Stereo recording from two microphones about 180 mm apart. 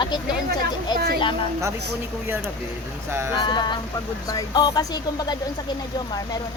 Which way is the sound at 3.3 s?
25° left (ahead or behind).